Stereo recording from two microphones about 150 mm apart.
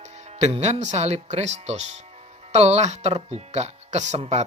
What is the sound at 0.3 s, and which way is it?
Speech, 50° right (ahead or behind).